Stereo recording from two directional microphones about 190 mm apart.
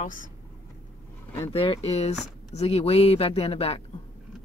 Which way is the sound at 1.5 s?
30° left (ahead or behind).